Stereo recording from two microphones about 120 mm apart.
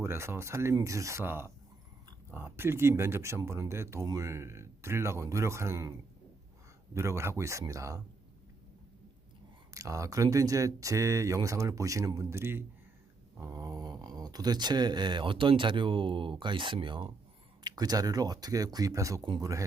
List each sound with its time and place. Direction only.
0.0 s speech: 20° right (ahead or behind)
6.9 s speech: 25° right (ahead or behind)
9.7 s speech: 25° right (ahead or behind)
19.2 s speech: 40° right (ahead or behind)